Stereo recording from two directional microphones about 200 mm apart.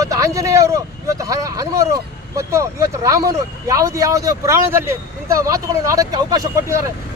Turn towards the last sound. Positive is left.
turn(degrees=-15)  # may be behind; listen again after turning